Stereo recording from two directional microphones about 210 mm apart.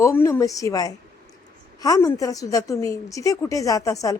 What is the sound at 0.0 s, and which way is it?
A woman's voice, 15° left (ahead or behind).